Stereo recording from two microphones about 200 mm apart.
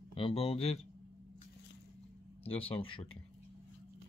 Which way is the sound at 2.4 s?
25° left (ahead or behind).